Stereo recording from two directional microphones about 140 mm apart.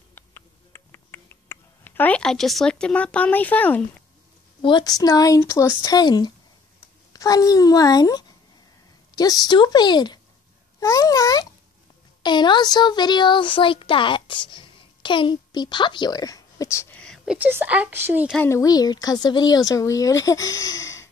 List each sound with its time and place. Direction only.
0.1 s a sound: 15° left (ahead or behind)
4.6 s a child's voice: 35° left (ahead or behind)
16.9 s a sound: 5° left (ahead or behind)
17.5 s speech: 10° right (ahead or behind)
18.3 s a child's voice: 15° left (ahead or behind)
18.6 s speech: 30° left (ahead or behind)